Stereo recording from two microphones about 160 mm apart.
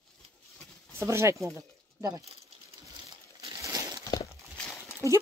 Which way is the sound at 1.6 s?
20° right (ahead or behind).